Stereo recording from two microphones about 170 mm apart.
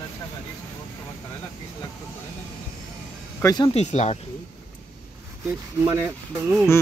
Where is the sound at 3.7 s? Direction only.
40° left (ahead or behind).